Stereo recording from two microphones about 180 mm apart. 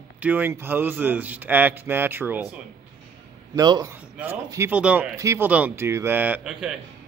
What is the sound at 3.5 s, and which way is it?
A man's voice, 20° right (ahead or behind).